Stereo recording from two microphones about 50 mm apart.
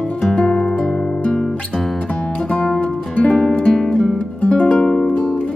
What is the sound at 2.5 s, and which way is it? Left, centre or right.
Music, centre.